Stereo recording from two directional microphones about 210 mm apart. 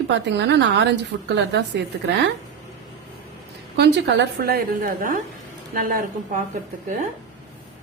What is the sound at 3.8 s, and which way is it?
A woman's voice, 55° right (ahead or behind).